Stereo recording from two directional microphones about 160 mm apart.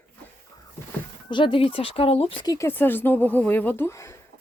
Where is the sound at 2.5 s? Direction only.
15° left (ahead or behind).